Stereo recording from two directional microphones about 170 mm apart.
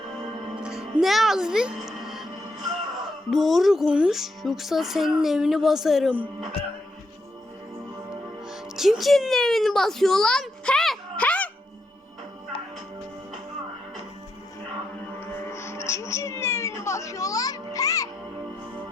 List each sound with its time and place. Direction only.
0.6 s music: 5° right (ahead or behind)
3.2 s speech: centre (ahead or behind)
8.4 s speech: 5° right (ahead or behind)
15.2 s music: 15° left (ahead or behind)